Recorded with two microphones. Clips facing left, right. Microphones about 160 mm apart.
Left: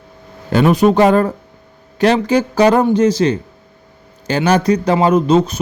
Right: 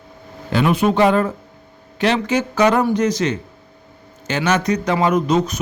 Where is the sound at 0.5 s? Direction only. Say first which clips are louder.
Left 5 dB; 40° left (ahead or behind).